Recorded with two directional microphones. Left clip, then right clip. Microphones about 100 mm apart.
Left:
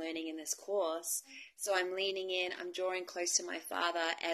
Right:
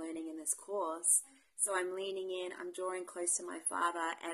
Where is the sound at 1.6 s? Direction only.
30° right (ahead or behind).